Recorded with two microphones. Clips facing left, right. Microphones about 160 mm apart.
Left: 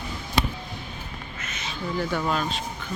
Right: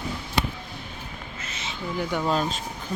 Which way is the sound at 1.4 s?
30° right (ahead or behind).